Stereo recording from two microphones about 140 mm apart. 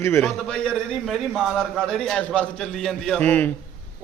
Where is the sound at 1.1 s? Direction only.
Centre (ahead or behind).